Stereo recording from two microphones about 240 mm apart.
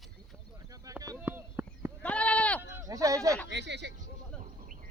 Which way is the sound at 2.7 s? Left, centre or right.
Centre.